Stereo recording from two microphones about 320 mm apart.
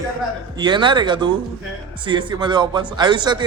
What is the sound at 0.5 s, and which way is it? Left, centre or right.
A man's voice, centre.